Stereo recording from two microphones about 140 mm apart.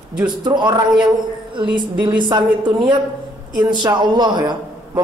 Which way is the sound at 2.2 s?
30° right (ahead or behind).